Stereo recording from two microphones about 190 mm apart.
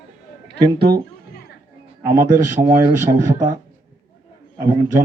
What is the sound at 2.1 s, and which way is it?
Speech, 45° right (ahead or behind).